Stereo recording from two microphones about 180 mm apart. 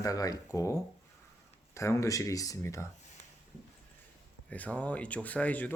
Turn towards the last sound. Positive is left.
turn(degrees=10)  # may be behind; listen again after turning